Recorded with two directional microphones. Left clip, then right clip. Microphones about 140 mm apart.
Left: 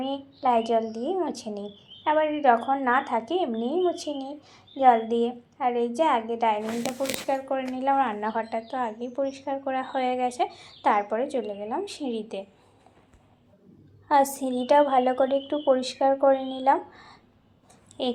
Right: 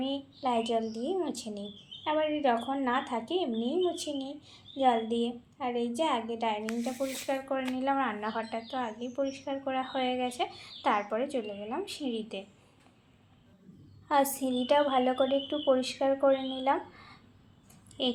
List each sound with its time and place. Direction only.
0.0 s a woman's voice: 5° left (ahead or behind)
7.3 s speech: 30° left (ahead or behind)
14.1 s speech: 25° left (ahead or behind)
18.0 s speech: 30° left (ahead or behind)